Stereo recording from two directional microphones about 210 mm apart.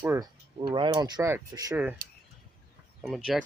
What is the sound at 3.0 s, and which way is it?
Speech, centre (ahead or behind).